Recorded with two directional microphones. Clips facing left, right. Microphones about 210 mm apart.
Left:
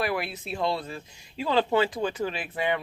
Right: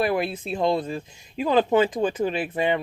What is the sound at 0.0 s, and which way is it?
Speech, 20° right (ahead or behind).